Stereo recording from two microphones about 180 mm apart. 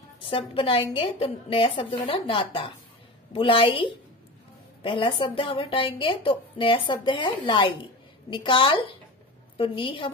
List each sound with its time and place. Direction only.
0.2 s a woman's voice: 30° left (ahead or behind)